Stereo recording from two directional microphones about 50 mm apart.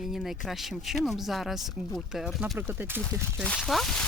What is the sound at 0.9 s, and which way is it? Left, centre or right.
Speech, centre.